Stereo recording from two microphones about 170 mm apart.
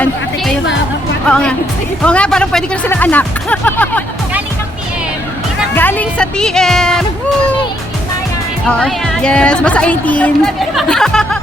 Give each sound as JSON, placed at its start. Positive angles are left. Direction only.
{"t": 1.3, "sound": "speech", "side_deg": 5}
{"t": 5.7, "sound": "speech", "side_deg": 10}
{"t": 8.6, "sound": "speech", "side_deg": 5}